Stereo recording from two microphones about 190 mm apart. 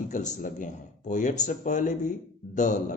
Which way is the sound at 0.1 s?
40° left (ahead or behind).